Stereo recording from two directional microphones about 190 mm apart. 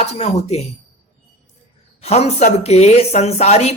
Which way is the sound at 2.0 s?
35° left (ahead or behind).